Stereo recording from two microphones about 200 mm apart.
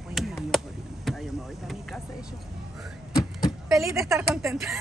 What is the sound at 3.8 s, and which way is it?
Speech, 15° right (ahead or behind).